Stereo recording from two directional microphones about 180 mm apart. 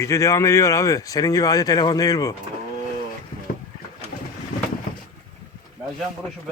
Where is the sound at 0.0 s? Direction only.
15° left (ahead or behind).